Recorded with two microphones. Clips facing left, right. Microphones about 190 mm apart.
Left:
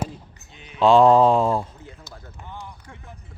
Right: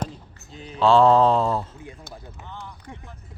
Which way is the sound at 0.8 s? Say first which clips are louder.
Left 2 dB; 15° left (ahead or behind).